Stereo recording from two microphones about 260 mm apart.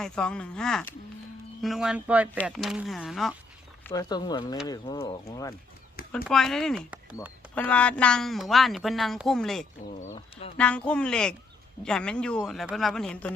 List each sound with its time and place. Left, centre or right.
0.0 s a woman's voice: centre
3.8 s speech: centre
6.2 s a woman's voice: centre
7.5 s a woman's voice: centre
9.9 s speech: left
10.6 s a woman's voice: centre